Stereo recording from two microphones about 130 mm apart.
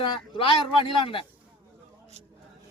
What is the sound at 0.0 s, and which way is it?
Speech, 40° left (ahead or behind).